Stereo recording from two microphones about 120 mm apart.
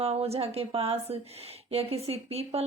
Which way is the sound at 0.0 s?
55° right (ahead or behind).